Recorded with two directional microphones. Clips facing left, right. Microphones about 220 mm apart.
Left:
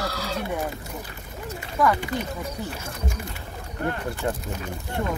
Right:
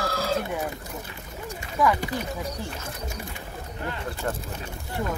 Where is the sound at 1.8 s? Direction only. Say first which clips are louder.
Left 1 dB; centre (ahead or behind).